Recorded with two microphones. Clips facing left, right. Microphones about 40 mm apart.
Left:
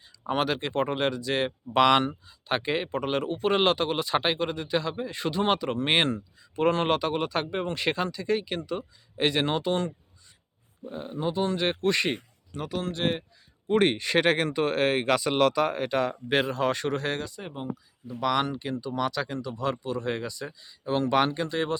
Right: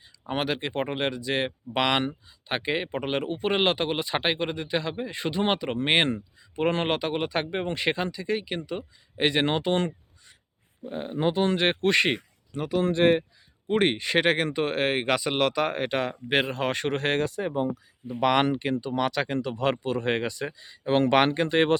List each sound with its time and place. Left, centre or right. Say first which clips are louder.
0.3 s speech: left 1 dB; centre; by 11.1 s right
11.2 s speech: right 3 dB; right
12.5 s speech: right 5 dB; centre
12.8 s speech: right 9 dB; right
18.1 s speech: right 4 dB; right